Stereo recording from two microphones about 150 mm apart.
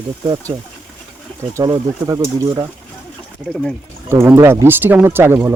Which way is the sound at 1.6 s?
25° right (ahead or behind).